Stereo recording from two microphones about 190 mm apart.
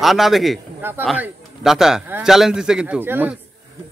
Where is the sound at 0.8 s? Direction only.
10° right (ahead or behind).